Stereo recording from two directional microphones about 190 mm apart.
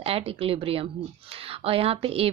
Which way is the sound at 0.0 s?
30° right (ahead or behind).